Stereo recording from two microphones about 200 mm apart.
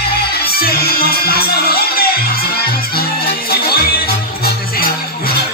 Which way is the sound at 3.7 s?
50° left (ahead or behind).